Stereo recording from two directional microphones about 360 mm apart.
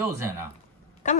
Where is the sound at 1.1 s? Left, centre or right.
Centre.